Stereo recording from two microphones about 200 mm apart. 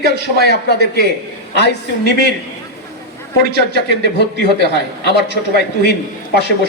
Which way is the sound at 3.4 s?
55° left (ahead or behind).